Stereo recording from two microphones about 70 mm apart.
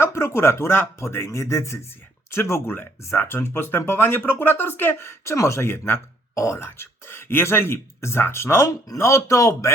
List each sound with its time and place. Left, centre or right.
0.0 s speech: left
6.3 s a man's voice: left